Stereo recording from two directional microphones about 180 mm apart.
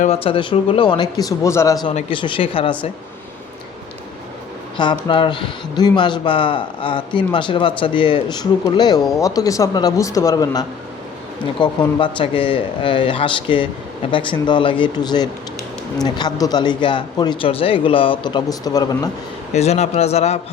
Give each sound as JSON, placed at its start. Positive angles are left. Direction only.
{"t": 0.0, "sound": "a man's voice", "side_deg": 35}
{"t": 4.8, "sound": "a man's voice", "side_deg": 25}
{"t": 19.5, "sound": "a man's voice", "side_deg": 35}